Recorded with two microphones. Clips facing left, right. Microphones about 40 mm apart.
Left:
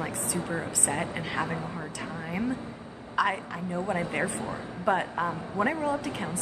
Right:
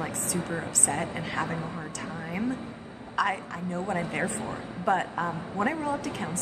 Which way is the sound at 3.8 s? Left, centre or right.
Left.